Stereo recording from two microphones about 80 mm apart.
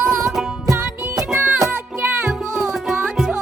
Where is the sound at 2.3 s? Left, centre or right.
Centre.